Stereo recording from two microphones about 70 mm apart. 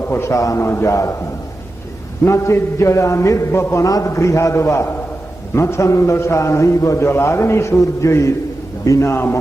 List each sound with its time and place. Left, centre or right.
0.0 s a man's voice: left
2.2 s a man's voice: left
3.8 s a man's voice: left